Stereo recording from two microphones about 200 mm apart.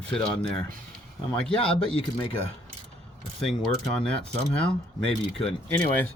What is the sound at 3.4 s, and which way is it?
Speech, centre (ahead or behind).